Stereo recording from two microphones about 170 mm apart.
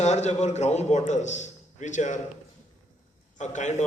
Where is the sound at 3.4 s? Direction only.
45° left (ahead or behind).